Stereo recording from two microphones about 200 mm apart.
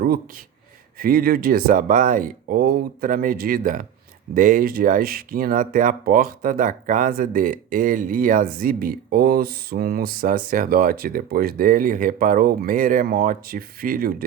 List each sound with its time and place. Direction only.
0.0 s speech: 50° right (ahead or behind)